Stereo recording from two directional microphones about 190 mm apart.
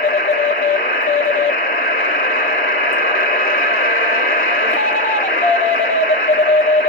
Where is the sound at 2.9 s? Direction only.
50° left (ahead or behind).